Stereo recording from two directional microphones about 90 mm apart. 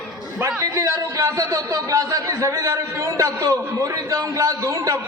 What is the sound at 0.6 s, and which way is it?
A man's voice, 35° right (ahead or behind).